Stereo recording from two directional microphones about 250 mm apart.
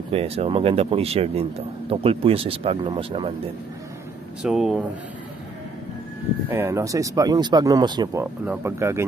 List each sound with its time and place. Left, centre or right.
0.1 s speech: right
4.4 s speech: centre
6.5 s speech: centre